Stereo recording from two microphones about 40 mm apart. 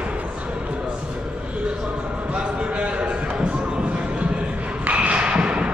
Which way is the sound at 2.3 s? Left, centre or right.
Right.